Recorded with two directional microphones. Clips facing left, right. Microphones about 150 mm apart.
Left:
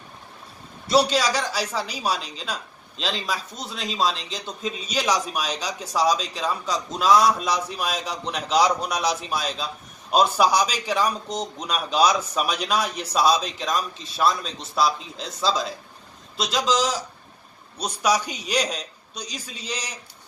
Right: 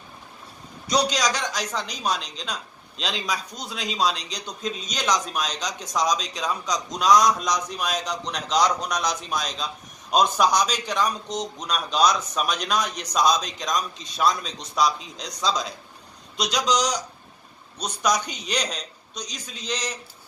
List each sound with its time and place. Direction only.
0.8 s a man's voice: 5° left (ahead or behind)